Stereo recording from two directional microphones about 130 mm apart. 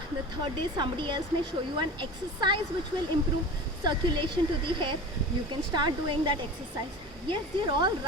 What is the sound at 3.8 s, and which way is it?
Speech, 35° right (ahead or behind).